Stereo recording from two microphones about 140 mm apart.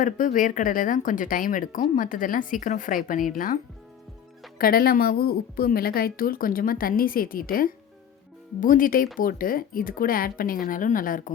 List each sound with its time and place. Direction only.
0.0 s speech: 70° left (ahead or behind)
4.5 s a woman's voice: 90° left
8.6 s speech: 75° left (ahead or behind)